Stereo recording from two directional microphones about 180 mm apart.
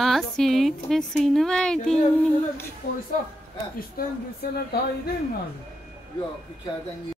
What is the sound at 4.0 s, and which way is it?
Speech, 55° left (ahead or behind).